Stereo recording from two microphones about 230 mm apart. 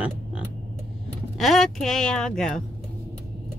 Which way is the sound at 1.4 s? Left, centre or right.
Centre.